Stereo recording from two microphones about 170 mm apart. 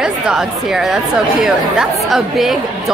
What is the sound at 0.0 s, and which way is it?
Speech, 5° right (ahead or behind).